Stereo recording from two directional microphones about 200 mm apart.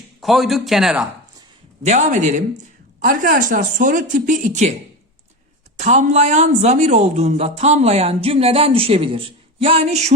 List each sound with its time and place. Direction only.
0.2 s speech: centre (ahead or behind)
1.8 s speech: 35° right (ahead or behind)
5.7 s speech: 35° right (ahead or behind)